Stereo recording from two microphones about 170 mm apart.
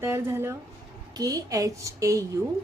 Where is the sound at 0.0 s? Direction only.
15° right (ahead or behind).